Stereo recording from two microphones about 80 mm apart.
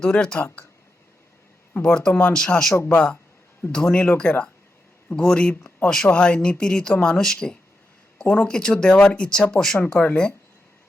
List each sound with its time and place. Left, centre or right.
0.0 s speech: centre
1.7 s speech: centre